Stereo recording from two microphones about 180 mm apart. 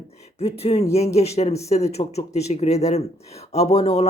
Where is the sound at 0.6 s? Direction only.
35° left (ahead or behind).